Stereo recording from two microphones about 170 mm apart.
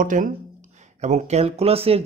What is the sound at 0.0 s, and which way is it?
Speech, 50° right (ahead or behind).